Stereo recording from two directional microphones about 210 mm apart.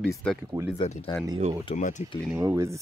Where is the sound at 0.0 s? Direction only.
5° left (ahead or behind).